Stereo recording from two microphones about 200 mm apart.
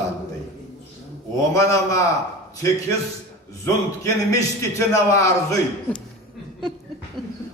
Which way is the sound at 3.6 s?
15° left (ahead or behind).